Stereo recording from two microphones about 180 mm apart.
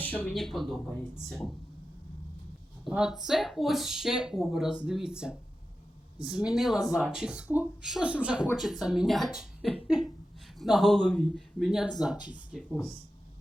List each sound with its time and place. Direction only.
0.0 s speech: 10° left (ahead or behind)
2.8 s speech: centre (ahead or behind)